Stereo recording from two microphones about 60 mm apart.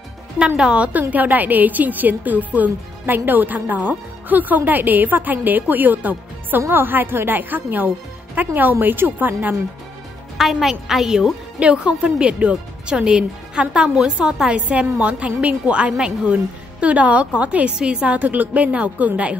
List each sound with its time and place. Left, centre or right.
0.6 s a woman's voice: centre
10.3 s a woman's voice: centre
11.6 s a woman's voice: centre